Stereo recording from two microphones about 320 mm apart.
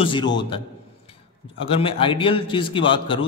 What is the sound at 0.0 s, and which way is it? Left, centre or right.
Speech, centre.